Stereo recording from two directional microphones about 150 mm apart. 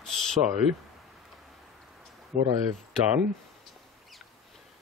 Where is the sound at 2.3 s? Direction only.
65° right (ahead or behind).